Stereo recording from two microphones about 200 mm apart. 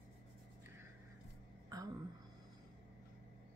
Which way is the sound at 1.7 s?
20° right (ahead or behind).